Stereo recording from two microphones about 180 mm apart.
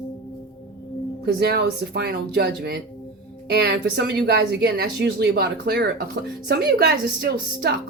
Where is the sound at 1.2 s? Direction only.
65° right (ahead or behind).